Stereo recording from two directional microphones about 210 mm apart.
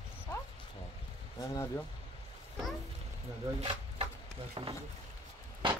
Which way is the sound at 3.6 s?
25° right (ahead or behind).